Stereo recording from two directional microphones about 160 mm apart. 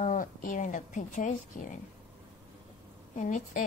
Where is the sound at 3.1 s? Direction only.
50° left (ahead or behind).